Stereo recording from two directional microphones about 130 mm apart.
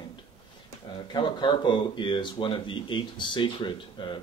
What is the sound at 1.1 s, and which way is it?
Speech, 35° left (ahead or behind).